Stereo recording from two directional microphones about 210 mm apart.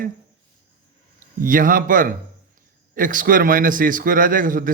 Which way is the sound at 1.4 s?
40° right (ahead or behind).